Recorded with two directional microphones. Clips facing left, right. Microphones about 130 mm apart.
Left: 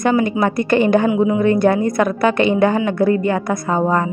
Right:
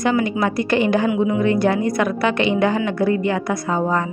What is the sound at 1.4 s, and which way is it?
A woman's voice, 50° left (ahead or behind).